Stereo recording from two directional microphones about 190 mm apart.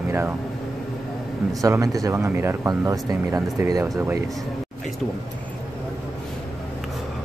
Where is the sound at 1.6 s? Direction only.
20° right (ahead or behind).